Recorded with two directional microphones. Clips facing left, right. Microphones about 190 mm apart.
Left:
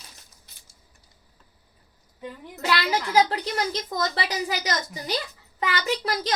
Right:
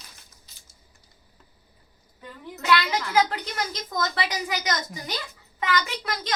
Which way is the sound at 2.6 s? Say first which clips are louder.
Right 1 dB; 35° left (ahead or behind).